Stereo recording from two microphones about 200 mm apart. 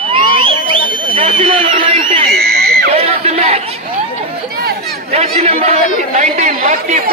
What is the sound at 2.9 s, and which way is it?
Speech, 30° right (ahead or behind).